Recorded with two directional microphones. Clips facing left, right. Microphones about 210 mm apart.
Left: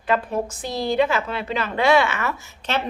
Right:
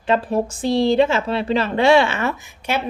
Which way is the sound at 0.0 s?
30° right (ahead or behind).